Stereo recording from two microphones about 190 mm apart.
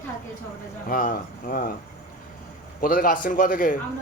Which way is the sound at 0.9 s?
45° left (ahead or behind).